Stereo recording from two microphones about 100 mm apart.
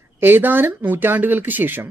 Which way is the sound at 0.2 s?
20° right (ahead or behind).